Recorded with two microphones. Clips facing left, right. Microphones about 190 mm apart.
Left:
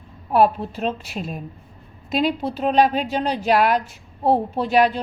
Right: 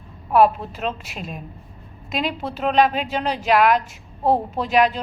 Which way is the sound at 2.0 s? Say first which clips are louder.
Left 4 dB; 35° left (ahead or behind).